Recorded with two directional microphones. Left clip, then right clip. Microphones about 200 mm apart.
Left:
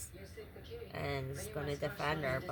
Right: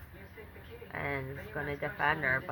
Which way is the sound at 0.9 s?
30° left (ahead or behind).